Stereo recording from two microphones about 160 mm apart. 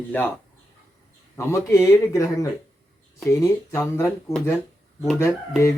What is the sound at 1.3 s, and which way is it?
Speech, 15° left (ahead or behind).